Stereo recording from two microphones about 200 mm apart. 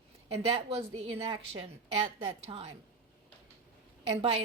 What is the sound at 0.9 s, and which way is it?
A woman's voice, 25° right (ahead or behind).